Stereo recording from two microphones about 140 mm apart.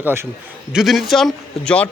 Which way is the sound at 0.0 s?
15° right (ahead or behind).